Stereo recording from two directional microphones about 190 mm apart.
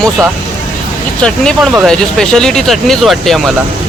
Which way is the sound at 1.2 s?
5° left (ahead or behind).